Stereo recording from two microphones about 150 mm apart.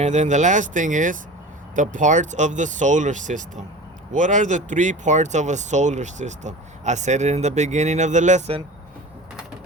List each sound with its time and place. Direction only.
0.0 s speech: 50° right (ahead or behind)